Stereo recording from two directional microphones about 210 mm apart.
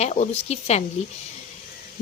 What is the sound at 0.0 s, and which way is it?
Speech, 30° left (ahead or behind).